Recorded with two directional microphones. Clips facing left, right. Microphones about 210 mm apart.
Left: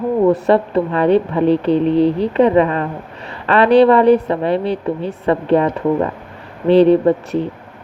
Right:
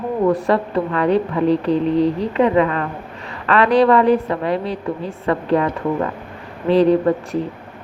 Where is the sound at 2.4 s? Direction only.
30° left (ahead or behind).